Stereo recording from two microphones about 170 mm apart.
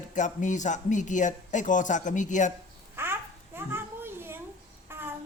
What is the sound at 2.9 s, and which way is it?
Babbling, 15° right (ahead or behind).